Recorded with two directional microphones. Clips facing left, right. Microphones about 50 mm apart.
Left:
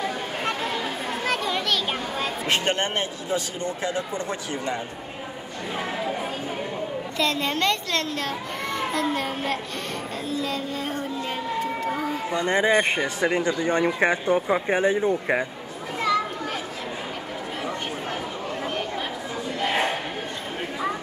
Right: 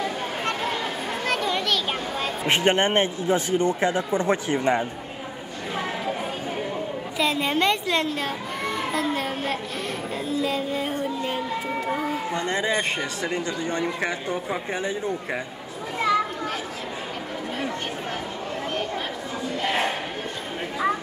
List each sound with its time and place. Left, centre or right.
0.0 s children playing: centre
2.4 s speech: right
7.2 s a child's voice: centre
10.3 s child singing: centre
12.4 s speech: left